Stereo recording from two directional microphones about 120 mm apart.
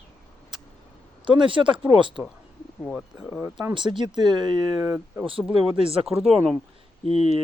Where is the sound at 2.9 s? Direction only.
5° right (ahead or behind).